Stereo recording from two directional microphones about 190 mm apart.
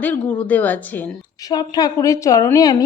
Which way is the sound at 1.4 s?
20° left (ahead or behind).